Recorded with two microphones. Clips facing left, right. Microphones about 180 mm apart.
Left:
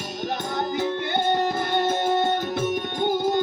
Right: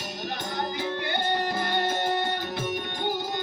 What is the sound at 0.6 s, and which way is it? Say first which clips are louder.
Music: left 5 dB; 50° left (ahead or behind).